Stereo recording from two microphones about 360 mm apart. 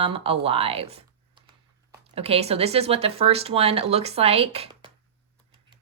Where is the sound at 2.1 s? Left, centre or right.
Centre.